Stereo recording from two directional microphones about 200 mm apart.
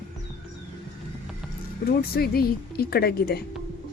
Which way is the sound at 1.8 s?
50° left (ahead or behind).